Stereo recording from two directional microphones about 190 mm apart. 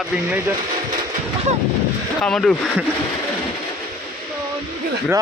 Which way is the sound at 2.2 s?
5° left (ahead or behind).